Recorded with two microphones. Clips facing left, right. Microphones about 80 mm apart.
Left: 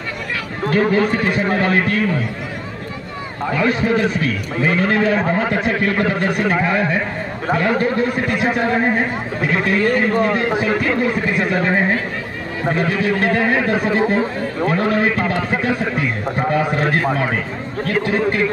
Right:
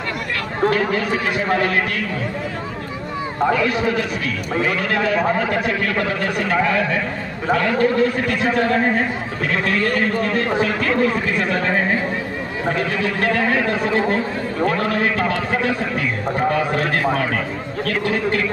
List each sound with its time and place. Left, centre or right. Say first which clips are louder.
0.7 s a man's voice: left 4 dB; left
3.5 s a man's voice: left 2 dB; left